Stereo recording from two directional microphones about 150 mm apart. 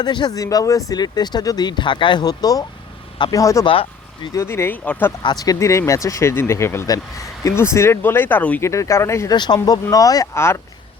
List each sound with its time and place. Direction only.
0.0 s speech: 30° left (ahead or behind)
3.6 s speech: 35° left (ahead or behind)
4.4 s speech: 15° left (ahead or behind)
5.2 s speech: 25° left (ahead or behind)